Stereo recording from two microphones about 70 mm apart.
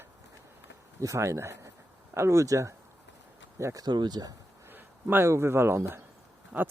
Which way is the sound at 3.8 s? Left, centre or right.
Right.